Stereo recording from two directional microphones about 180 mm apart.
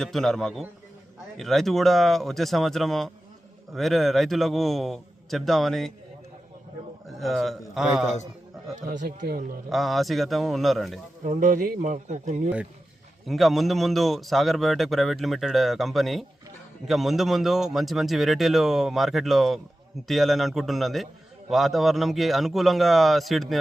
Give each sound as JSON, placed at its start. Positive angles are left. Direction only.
{"t": 0.0, "sound": "a man's voice", "side_deg": 0}
{"t": 7.2, "sound": "a man's voice", "side_deg": 0}
{"t": 9.0, "sound": "speech", "side_deg": -55}
{"t": 9.6, "sound": "a man's voice", "side_deg": 0}
{"t": 11.2, "sound": "speech", "side_deg": -45}
{"t": 13.2, "sound": "a man's voice", "side_deg": 0}